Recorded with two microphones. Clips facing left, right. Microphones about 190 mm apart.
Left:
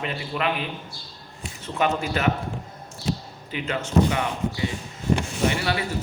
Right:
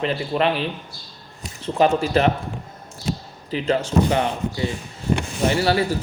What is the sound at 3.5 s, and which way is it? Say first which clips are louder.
Speech: right 3 dB; 35° right (ahead or behind).